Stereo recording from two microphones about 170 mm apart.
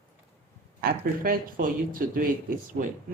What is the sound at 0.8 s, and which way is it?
Speech, 60° right (ahead or behind).